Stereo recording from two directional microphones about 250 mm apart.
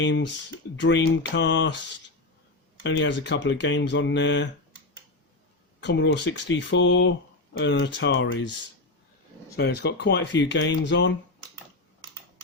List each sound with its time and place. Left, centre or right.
0.0 s speech: left
2.8 s speech: left
5.8 s speech: left
9.6 s speech: left